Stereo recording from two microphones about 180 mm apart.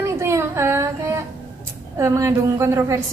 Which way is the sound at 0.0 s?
15° right (ahead or behind).